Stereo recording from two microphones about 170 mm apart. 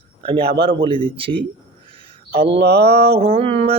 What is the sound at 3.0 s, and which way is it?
Speech, 35° right (ahead or behind).